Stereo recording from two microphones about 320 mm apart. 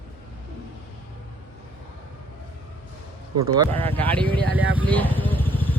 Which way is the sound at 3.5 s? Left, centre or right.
Centre.